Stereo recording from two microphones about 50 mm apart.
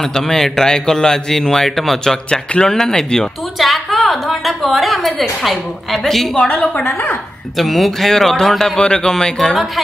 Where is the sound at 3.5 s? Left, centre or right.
Centre.